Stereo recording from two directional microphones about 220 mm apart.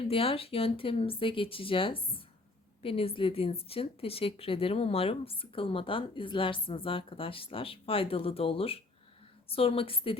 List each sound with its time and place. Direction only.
0.1 s speech: 25° left (ahead or behind)